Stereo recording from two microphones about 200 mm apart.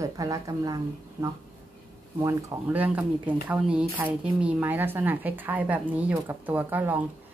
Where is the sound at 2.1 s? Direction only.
15° right (ahead or behind).